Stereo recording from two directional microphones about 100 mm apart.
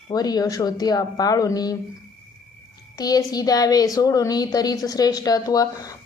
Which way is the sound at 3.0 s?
40° left (ahead or behind).